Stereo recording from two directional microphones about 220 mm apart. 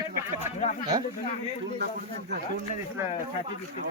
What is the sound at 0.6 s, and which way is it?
Speech, 35° left (ahead or behind).